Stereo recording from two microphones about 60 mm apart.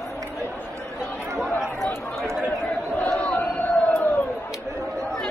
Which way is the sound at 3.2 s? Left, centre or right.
Left.